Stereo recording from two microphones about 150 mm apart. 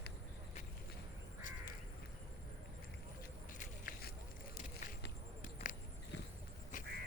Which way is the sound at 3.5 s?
70° left (ahead or behind).